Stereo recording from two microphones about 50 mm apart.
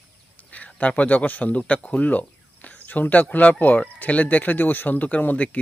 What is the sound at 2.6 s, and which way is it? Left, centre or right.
Cricket, left.